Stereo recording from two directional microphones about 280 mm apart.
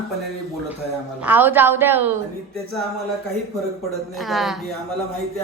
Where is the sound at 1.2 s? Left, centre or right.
Centre.